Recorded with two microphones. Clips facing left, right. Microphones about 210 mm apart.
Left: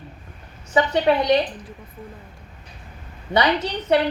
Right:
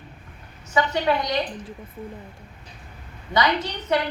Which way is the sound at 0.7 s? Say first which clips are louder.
Left 4 dB; 30° left (ahead or behind).